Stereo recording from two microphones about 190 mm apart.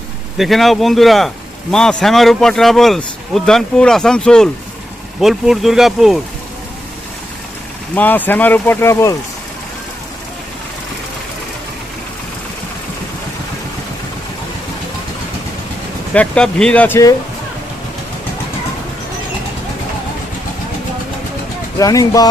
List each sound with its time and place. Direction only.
0.3 s speech: centre (ahead or behind)
7.9 s speech: 10° left (ahead or behind)
16.1 s speech: 5° left (ahead or behind)
21.8 s speech: 20° left (ahead or behind)